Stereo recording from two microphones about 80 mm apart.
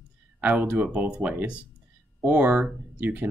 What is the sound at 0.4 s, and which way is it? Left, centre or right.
Speech, centre.